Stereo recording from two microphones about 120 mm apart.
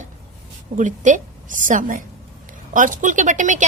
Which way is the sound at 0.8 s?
90° right.